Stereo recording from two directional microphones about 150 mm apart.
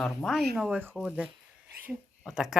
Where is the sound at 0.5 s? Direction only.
10° right (ahead or behind).